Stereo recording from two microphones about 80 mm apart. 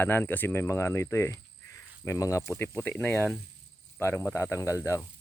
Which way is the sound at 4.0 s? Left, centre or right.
Left.